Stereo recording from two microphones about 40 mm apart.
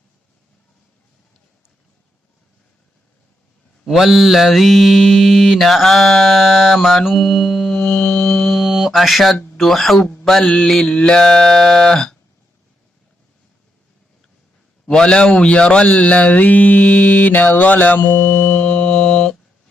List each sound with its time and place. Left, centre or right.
3.8 s mantra: centre
8.2 s music: centre
8.4 s mantra: centre
10.4 s mantra: left
14.8 s a man's voice: left
15.9 s mantra: left
18.5 s a sound: left